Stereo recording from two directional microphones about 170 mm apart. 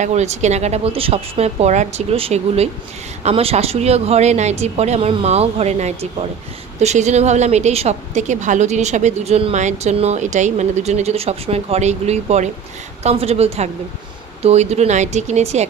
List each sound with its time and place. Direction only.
0.0 s a woman's voice: 40° right (ahead or behind)